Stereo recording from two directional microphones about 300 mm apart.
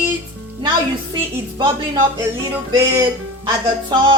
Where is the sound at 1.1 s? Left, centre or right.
Centre.